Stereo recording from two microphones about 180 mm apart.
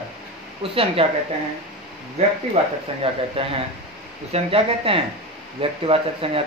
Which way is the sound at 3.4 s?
30° right (ahead or behind).